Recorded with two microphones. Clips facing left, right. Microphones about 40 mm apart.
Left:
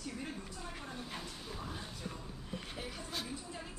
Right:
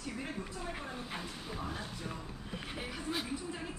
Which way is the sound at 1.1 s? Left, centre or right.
Centre.